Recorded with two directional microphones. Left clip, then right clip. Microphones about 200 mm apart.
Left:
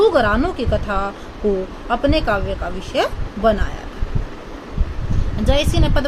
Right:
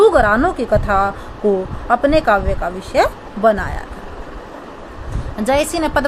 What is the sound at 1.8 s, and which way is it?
Speech, 20° right (ahead or behind).